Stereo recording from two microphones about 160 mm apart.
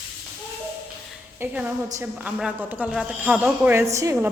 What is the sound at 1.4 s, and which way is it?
A woman's voice, 10° right (ahead or behind).